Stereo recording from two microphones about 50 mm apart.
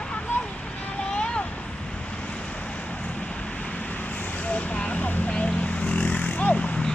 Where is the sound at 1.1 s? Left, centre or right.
Left.